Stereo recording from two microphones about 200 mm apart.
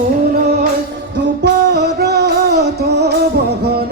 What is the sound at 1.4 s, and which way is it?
Music, 55° right (ahead or behind).